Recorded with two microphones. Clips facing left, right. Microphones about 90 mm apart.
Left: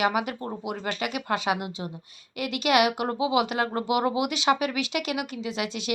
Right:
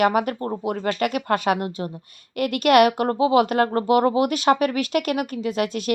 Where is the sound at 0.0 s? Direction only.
45° right (ahead or behind).